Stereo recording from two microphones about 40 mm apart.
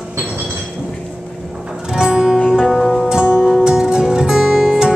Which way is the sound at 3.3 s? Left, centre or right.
Centre.